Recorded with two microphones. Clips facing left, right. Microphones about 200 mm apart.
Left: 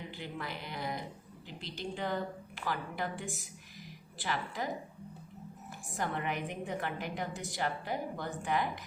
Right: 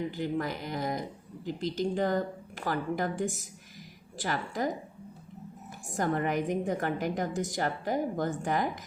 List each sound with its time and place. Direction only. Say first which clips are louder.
0.2 s a woman's voice: right 10 dB; 45° right (ahead or behind)
5.9 s a woman's voice: right 7 dB; 40° right (ahead or behind)